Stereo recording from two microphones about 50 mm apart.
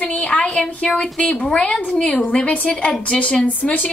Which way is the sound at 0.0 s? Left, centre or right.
Left.